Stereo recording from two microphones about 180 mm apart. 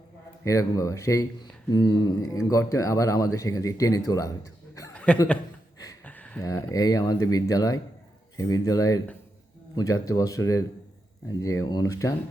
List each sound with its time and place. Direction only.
0.4 s speech: 15° left (ahead or behind)
5.1 s speech: 5° left (ahead or behind)
6.1 s a sound: 10° left (ahead or behind)
6.4 s speech: 15° left (ahead or behind)